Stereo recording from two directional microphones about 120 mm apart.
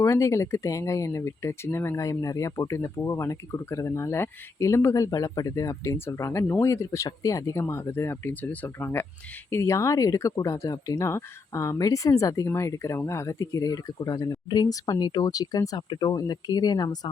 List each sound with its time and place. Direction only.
0.0 s speech: 25° left (ahead or behind)